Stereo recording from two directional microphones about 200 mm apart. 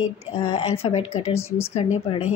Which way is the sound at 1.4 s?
10° left (ahead or behind).